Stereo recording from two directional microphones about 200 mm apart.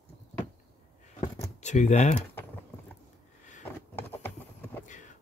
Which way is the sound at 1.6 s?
35° left (ahead or behind).